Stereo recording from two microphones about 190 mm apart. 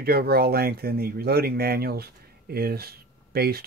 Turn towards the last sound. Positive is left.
turn(degrees=-55)  # may be behind; listen again after turning